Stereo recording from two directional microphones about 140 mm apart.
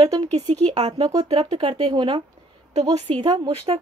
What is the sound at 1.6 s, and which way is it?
Speech, 30° right (ahead or behind).